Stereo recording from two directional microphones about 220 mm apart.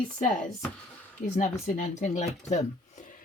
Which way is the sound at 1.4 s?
35° left (ahead or behind).